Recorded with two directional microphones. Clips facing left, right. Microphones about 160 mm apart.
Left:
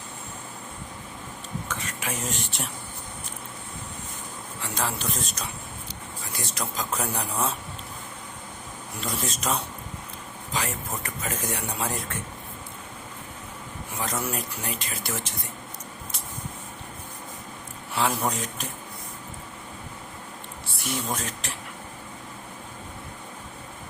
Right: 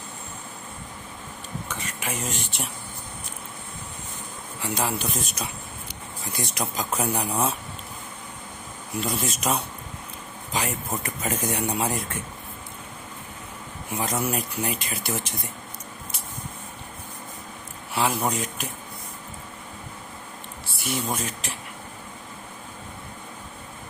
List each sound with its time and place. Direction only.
1.6 s speech: centre (ahead or behind)
4.6 s speech: 10° right (ahead or behind)
9.0 s speech: 10° right (ahead or behind)
13.9 s speech: 15° right (ahead or behind)
17.9 s speech: 5° right (ahead or behind)
20.7 s speech: centre (ahead or behind)